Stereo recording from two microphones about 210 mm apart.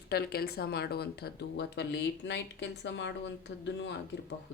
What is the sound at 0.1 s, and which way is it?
Speech, 50° left (ahead or behind).